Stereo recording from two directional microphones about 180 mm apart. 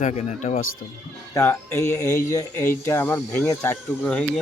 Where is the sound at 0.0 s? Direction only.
40° left (ahead or behind).